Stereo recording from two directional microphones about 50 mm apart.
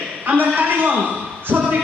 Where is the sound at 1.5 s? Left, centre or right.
Centre.